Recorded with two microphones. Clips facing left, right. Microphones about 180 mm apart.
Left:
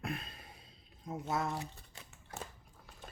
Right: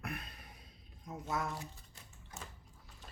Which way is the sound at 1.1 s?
30° left (ahead or behind).